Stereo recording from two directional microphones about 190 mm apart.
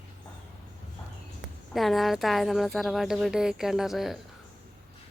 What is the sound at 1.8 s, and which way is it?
Speech, centre (ahead or behind).